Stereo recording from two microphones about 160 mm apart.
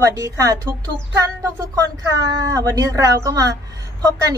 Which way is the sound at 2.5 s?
20° right (ahead or behind).